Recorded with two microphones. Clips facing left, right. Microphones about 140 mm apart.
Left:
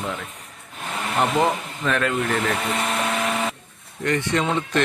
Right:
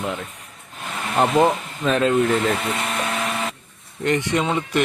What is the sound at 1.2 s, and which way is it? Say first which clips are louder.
Speech: right 4 dB; 20° right (ahead or behind).